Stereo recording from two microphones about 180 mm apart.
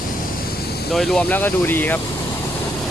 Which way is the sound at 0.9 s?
5° left (ahead or behind).